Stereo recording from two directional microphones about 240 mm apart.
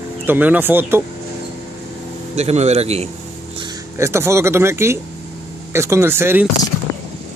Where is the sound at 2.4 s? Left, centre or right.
Right.